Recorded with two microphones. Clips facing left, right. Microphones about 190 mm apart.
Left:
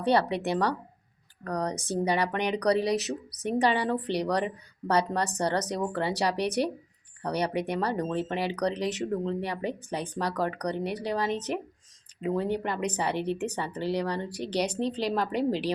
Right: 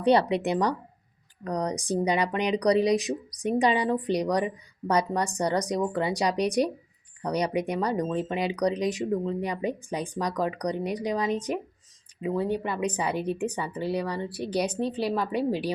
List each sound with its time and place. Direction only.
0.0 s speech: 20° right (ahead or behind)
12.8 s speech: 10° right (ahead or behind)